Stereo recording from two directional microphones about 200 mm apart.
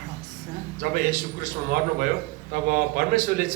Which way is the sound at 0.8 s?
45° right (ahead or behind).